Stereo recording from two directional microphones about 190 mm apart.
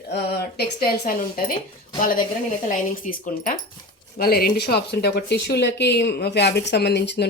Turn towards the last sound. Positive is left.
turn(degrees=65)  # may be behind; listen again after turning